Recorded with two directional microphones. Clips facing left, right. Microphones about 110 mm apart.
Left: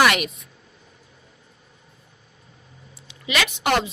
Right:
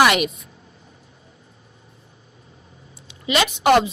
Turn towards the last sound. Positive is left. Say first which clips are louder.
# right 6 dB
turn(degrees=-30)  # may be behind; listen again after turning